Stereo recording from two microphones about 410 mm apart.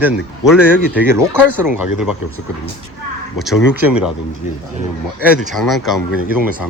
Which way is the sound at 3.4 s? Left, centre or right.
Centre.